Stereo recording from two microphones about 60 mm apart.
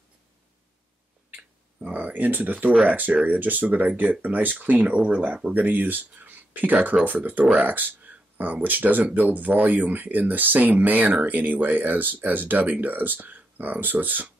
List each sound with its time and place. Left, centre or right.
1.8 s speech: right